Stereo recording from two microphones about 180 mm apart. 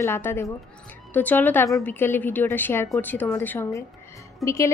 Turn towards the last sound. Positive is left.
turn(degrees=15)  # may be behind; listen again after turning